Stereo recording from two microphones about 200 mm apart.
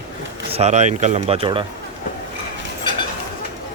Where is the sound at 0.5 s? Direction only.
35° right (ahead or behind).